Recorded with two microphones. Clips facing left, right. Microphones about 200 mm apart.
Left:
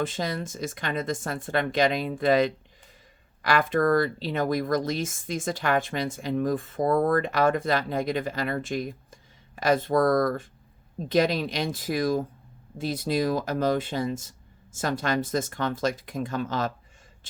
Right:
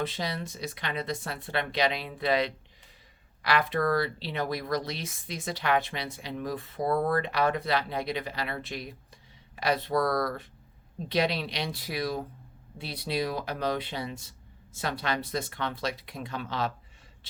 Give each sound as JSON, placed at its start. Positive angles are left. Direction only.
{"t": 0.0, "sound": "speech", "side_deg": 45}